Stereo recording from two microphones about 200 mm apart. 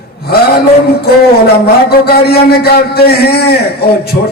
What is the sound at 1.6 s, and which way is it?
A man's voice, 50° left (ahead or behind).